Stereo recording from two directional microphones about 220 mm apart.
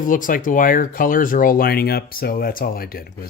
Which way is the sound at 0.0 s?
40° left (ahead or behind).